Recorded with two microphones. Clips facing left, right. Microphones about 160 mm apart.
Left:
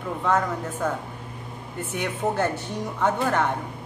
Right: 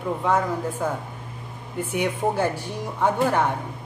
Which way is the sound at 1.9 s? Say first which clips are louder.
Right 2 dB; 10° right (ahead or behind).